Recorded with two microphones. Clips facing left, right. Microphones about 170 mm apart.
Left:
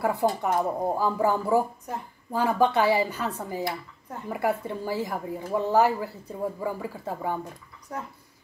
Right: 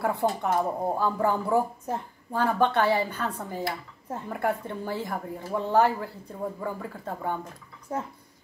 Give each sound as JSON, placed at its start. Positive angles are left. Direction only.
{"t": 0.0, "sound": "speech", "side_deg": 5}
{"t": 7.9, "sound": "a woman's voice", "side_deg": -25}